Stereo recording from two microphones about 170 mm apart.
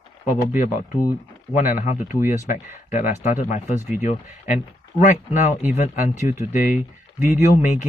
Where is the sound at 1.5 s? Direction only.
50° left (ahead or behind).